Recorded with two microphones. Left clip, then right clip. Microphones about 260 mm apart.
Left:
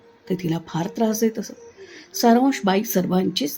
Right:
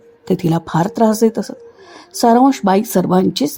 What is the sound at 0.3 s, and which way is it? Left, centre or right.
Speech, right.